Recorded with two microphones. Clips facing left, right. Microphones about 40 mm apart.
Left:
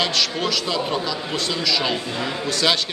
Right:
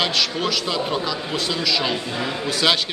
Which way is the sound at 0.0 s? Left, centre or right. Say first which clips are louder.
Even; centre.